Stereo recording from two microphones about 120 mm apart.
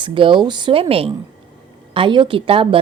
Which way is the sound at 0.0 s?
45° right (ahead or behind).